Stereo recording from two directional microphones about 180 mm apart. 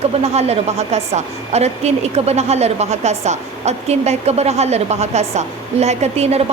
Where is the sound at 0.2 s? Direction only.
35° right (ahead or behind).